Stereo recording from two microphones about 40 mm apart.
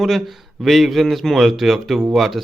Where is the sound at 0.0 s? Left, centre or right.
Centre.